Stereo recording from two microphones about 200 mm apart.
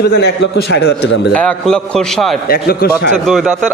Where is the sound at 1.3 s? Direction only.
5° left (ahead or behind).